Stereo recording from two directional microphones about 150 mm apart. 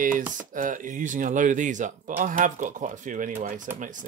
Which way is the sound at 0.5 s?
60° right (ahead or behind).